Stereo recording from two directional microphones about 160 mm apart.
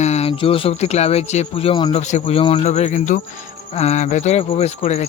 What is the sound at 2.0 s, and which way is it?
A man's voice, 45° left (ahead or behind).